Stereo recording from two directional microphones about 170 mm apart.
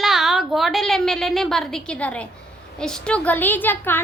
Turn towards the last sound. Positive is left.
turn(degrees=10)  # may be behind; listen again after turning